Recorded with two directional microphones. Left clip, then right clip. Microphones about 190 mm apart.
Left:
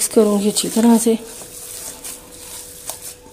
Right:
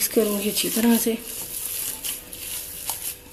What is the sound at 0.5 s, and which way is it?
Speech, 40° left (ahead or behind).